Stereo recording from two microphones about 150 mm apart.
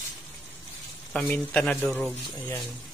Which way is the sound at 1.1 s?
10° left (ahead or behind).